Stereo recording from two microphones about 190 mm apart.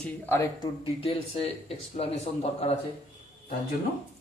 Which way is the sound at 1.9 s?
35° left (ahead or behind).